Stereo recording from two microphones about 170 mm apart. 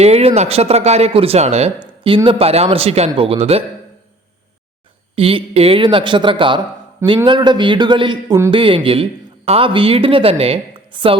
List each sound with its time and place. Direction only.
0.0 s speech: 35° right (ahead or behind)
5.1 s a man's voice: 35° right (ahead or behind)